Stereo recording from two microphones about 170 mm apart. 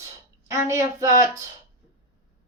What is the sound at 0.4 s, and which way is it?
Speech, 15° right (ahead or behind).